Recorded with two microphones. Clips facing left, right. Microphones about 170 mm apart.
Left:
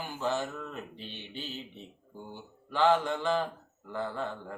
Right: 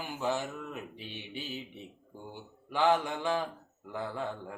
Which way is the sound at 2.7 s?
10° right (ahead or behind).